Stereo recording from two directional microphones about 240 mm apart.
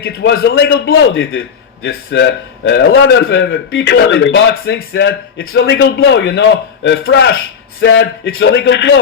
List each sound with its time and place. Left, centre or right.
0.0 s a man's voice: left